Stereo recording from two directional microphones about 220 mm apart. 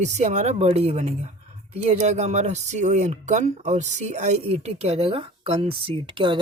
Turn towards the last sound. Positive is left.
turn(degrees=-20)  # may be behind; listen again after turning